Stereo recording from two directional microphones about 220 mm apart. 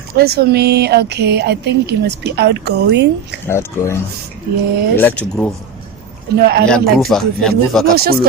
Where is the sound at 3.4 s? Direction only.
10° left (ahead or behind).